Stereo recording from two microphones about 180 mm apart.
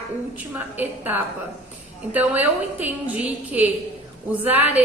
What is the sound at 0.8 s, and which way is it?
A woman's voice, 10° right (ahead or behind).